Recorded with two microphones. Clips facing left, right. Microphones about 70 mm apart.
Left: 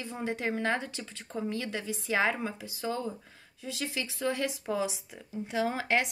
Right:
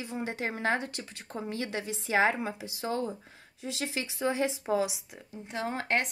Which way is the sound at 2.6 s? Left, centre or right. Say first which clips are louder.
Right 2 dB; right.